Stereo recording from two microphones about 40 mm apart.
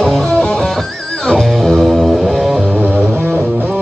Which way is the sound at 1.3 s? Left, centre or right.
Centre.